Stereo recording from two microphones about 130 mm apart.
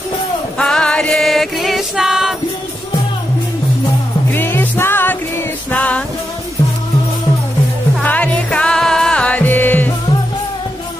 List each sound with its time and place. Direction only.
0.6 s music: 5° left (ahead or behind)
4.3 s music: 15° left (ahead or behind)
8.0 s music: 10° left (ahead or behind)